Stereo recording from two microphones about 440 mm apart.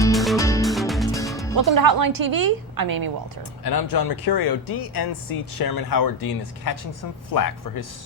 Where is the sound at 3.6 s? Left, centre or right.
Left.